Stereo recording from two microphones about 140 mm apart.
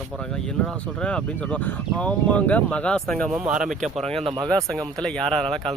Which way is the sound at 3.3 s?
5° right (ahead or behind).